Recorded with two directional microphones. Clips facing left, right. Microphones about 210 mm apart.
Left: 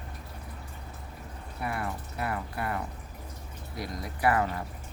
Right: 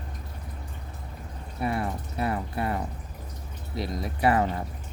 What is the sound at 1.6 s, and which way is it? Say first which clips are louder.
Speech: right 5 dB; 25° right (ahead or behind).